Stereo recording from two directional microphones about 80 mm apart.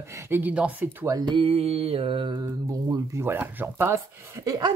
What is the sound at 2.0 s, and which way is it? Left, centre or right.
Mantra, right.